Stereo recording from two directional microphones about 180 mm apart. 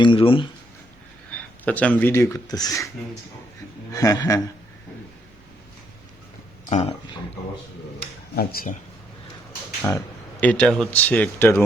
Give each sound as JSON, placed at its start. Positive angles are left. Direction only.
{"t": 0.0, "sound": "speech", "side_deg": 30}
{"t": 1.3, "sound": "speech", "side_deg": 10}
{"t": 3.9, "sound": "speech", "side_deg": 20}
{"t": 6.7, "sound": "speech", "side_deg": 35}
{"t": 8.4, "sound": "speech", "side_deg": 50}
{"t": 10.4, "sound": "speech", "side_deg": 5}